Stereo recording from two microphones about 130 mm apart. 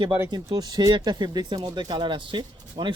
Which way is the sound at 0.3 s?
35° right (ahead or behind).